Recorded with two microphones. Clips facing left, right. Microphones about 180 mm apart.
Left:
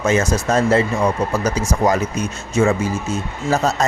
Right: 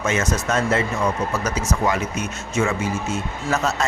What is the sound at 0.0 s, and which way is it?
Speech, 35° left (ahead or behind).